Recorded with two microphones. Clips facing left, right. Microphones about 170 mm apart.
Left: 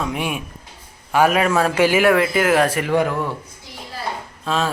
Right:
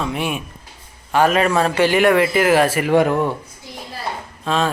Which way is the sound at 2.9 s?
25° right (ahead or behind).